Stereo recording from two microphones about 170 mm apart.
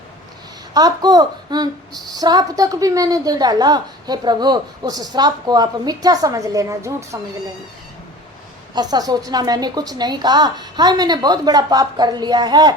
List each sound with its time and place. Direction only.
0.7 s a woman's voice: 25° right (ahead or behind)
8.7 s a woman's voice: 25° right (ahead or behind)